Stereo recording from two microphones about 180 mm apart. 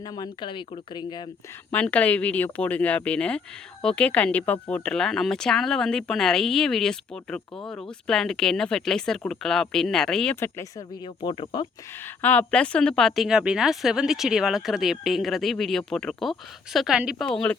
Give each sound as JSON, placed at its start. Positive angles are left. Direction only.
{"t": 0.0, "sound": "speech", "side_deg": 20}
{"t": 1.7, "sound": "speech", "side_deg": 5}
{"t": 10.6, "sound": "speech", "side_deg": 25}
{"t": 12.0, "sound": "speech", "side_deg": 10}